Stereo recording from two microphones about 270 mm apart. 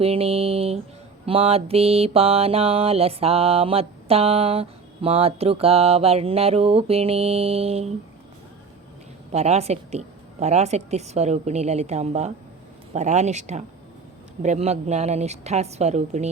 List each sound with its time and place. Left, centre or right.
0.0 s mantra: right
9.3 s mantra: right